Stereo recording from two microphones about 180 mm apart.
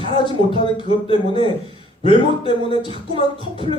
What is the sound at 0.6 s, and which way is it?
Speech, 30° left (ahead or behind).